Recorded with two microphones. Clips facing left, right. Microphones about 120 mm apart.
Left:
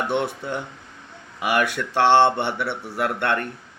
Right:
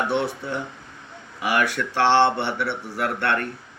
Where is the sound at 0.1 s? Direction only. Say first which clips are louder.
Even; 20° left (ahead or behind).